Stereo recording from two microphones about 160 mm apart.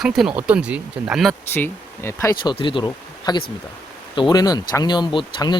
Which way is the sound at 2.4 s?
30° left (ahead or behind).